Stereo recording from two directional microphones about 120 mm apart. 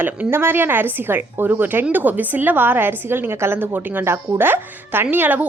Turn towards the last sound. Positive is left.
turn(degrees=-15)  # may be behind; listen again after turning